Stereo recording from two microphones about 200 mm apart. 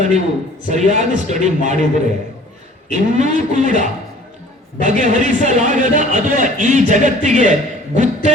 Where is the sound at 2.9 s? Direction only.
35° right (ahead or behind).